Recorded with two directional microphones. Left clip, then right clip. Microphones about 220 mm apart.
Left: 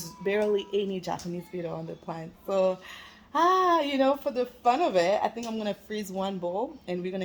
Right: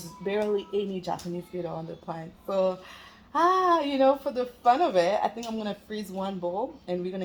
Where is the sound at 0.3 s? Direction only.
15° left (ahead or behind).